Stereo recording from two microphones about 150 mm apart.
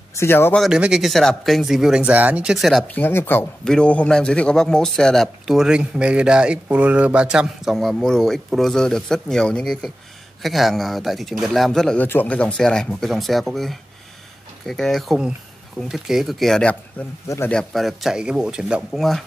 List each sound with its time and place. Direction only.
0.1 s speech: 15° left (ahead or behind)
0.6 s a man's voice: 5° right (ahead or behind)
2.9 s a man's voice: 15° left (ahead or behind)